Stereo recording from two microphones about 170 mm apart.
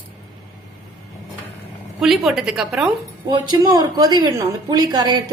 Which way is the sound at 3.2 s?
25° right (ahead or behind).